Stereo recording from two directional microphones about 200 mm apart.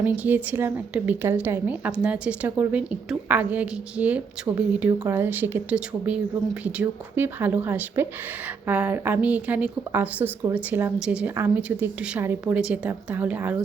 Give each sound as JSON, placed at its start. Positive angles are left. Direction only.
{"t": 0.2, "sound": "a woman's voice", "side_deg": -10}